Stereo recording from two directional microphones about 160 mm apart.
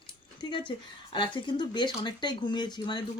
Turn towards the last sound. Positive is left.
turn(degrees=25)  # may be behind; listen again after turning